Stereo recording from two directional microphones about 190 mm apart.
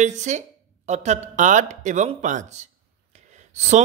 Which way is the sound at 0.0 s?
40° right (ahead or behind).